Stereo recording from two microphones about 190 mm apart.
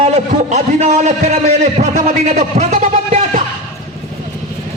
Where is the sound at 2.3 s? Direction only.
40° right (ahead or behind).